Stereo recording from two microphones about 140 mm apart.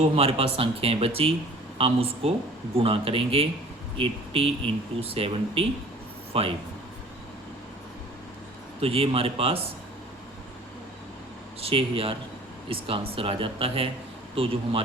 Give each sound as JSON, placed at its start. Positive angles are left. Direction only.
{"t": 0.0, "sound": "speech", "side_deg": -45}
{"t": 8.8, "sound": "speech", "side_deg": -45}
{"t": 11.6, "sound": "speech", "side_deg": -40}